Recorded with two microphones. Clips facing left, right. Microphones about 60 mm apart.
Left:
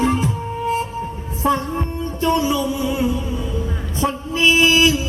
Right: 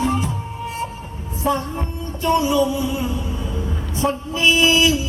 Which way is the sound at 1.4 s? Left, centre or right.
Left.